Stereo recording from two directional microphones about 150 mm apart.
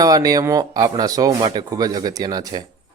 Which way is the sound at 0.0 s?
25° right (ahead or behind).